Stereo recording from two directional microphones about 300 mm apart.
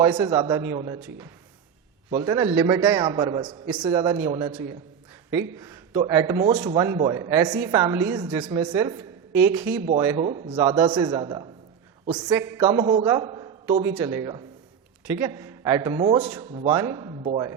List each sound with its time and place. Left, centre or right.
0.0 s a man's voice: centre
5.5 s a man's voice: centre